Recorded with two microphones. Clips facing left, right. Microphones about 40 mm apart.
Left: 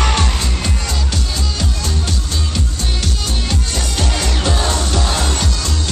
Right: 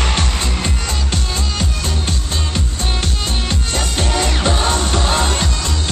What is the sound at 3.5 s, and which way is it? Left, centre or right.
Music, right.